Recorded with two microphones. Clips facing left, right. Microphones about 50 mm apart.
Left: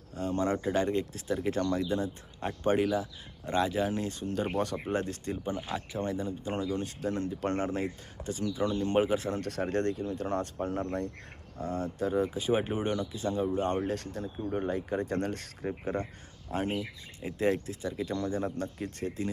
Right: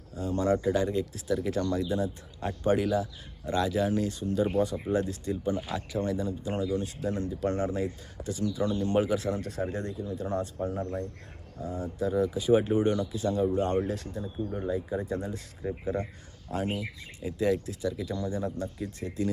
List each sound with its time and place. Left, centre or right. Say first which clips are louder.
0.2 s speech: right 2 dB; left
0.5 s speech: right 5 dB; left
0.8 s speech: even; left
9.4 s speech: left 3 dB; left
12.0 s speech: right 3 dB; left
13.8 s speech: even; left
14.4 s speech: left 4 dB; left
14.7 s speech: right 1 dB; left
15.8 s speech: right 2 dB; left